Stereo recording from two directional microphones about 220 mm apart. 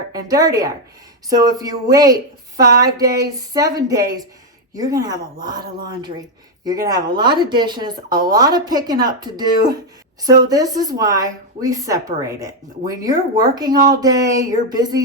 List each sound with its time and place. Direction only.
0.1 s a woman's voice: 15° right (ahead or behind)
6.7 s a woman's voice: 15° right (ahead or behind)